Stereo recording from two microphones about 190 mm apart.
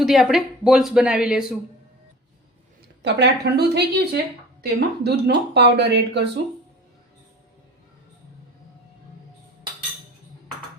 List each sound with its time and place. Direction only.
0.0 s speech: centre (ahead or behind)
3.0 s speech: 65° right (ahead or behind)